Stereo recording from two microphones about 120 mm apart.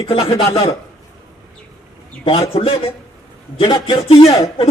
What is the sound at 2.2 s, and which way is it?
Speech, 50° left (ahead or behind).